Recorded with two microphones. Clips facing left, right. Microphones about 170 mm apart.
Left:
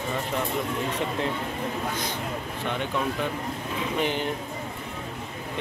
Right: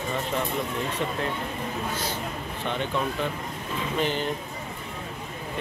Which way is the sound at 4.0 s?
15° left (ahead or behind).